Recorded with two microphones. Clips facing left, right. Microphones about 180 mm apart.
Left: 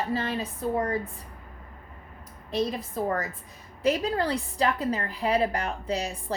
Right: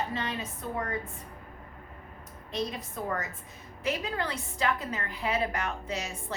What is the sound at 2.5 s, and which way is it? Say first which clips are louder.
A woman's voice: left 6 dB; 35° left (ahead or behind).